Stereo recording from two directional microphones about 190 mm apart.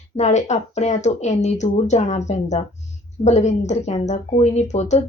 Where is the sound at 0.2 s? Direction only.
35° left (ahead or behind).